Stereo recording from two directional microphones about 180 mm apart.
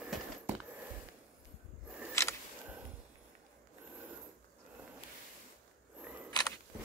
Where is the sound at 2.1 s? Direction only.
15° left (ahead or behind).